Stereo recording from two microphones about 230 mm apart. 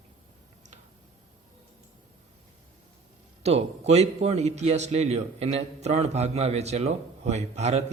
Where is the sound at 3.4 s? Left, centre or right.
Right.